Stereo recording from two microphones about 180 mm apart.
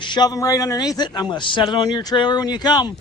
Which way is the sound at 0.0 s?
25° left (ahead or behind).